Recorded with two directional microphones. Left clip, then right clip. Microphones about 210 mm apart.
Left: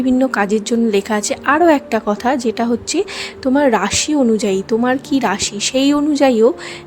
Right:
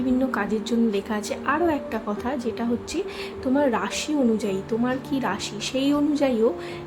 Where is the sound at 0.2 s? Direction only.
45° left (ahead or behind).